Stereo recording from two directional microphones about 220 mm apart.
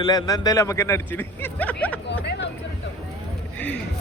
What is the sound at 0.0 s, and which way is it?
A man's voice, 15° left (ahead or behind).